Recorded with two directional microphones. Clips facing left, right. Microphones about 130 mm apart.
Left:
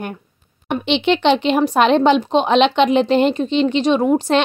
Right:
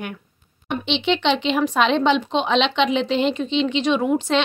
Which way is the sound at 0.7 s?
50° left (ahead or behind).